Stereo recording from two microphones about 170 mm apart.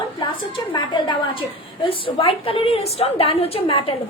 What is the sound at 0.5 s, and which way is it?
A woman's voice, 25° left (ahead or behind).